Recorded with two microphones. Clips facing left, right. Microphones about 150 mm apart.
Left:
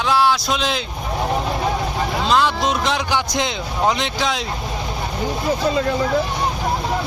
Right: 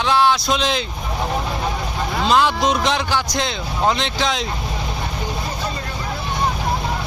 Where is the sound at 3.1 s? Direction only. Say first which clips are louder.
Left 1 dB; 15° left (ahead or behind).